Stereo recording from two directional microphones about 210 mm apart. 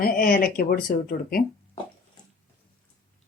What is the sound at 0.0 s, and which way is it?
Speech, 45° left (ahead or behind).